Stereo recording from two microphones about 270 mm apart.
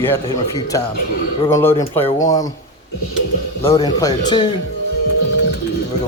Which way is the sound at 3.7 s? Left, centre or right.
Centre.